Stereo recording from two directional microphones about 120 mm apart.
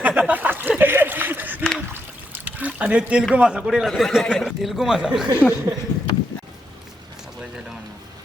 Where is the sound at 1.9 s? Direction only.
15° right (ahead or behind).